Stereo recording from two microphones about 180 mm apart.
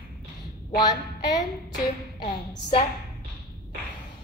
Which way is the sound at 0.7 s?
20° left (ahead or behind).